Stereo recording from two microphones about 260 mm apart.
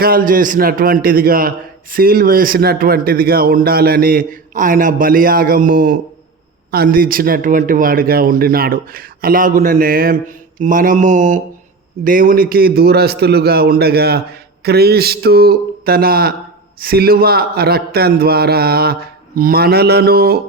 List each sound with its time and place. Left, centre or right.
0.0 s a man's voice: right